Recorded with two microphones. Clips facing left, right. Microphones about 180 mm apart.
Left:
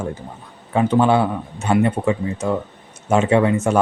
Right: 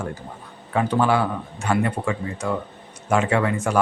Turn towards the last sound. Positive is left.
turn(degrees=25)  # may be behind; listen again after turning